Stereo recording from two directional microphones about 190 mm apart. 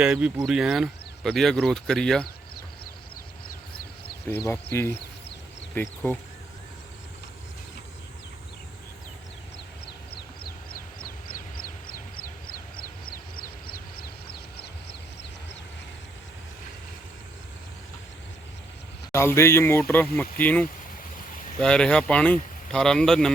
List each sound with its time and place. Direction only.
0.0 s speech: 5° right (ahead or behind)
4.4 s a man's voice: 15° left (ahead or behind)
10.2 s a sound: 55° left (ahead or behind)
12.1 s vehicle: 50° left (ahead or behind)
19.1 s a man's voice: 15° left (ahead or behind)